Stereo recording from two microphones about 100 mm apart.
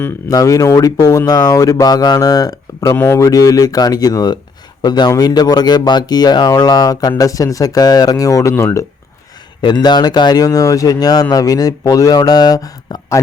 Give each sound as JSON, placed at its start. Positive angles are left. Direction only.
{"t": 0.3, "sound": "speech", "side_deg": 35}
{"t": 2.9, "sound": "speech", "side_deg": 25}
{"t": 9.6, "sound": "speech", "side_deg": 50}